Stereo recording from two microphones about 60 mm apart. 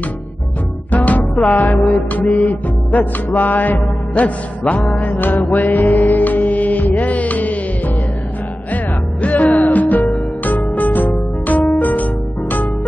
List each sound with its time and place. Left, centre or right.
0.9 s music: left